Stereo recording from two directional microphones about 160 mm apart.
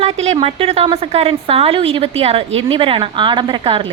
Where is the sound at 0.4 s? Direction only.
40° right (ahead or behind).